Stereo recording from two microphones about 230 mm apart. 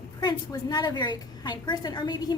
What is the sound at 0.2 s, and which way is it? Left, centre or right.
A woman's voice, centre.